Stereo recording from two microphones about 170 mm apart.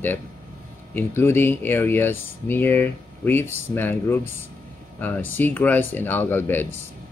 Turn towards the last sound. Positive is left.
turn(degrees=10)  # may be behind; listen again after turning